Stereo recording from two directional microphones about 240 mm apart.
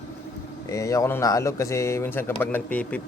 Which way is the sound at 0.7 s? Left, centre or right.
Centre.